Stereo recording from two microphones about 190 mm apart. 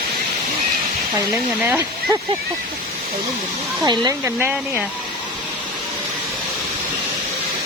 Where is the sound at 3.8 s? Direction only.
20° right (ahead or behind).